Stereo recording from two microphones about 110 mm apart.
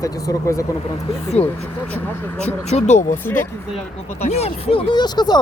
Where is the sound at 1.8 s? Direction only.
15° left (ahead or behind).